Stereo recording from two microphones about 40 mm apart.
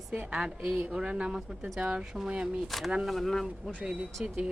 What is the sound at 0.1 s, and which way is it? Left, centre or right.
Speech, right.